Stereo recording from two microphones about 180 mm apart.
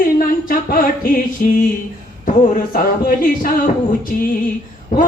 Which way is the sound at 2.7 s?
50° left (ahead or behind).